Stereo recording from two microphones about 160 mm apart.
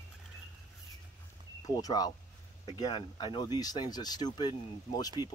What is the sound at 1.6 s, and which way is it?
Speech, 25° left (ahead or behind).